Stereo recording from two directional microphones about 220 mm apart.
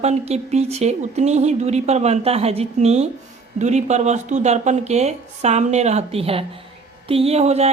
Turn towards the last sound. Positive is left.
turn(degrees=-30)  # may be behind; listen again after turning